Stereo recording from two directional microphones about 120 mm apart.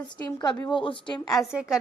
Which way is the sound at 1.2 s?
Centre (ahead or behind).